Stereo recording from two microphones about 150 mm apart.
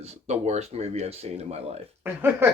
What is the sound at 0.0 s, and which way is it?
Speech, 45° right (ahead or behind).